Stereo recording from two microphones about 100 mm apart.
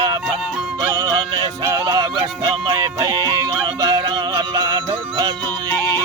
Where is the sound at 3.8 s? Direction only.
40° right (ahead or behind).